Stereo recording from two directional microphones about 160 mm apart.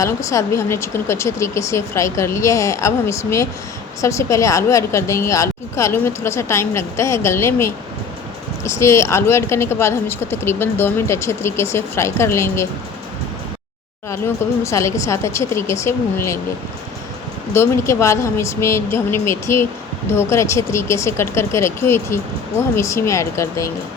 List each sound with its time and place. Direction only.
0.0 s speech: 20° left (ahead or behind)
14.6 s speech: 20° left (ahead or behind)
17.5 s speech: 15° left (ahead or behind)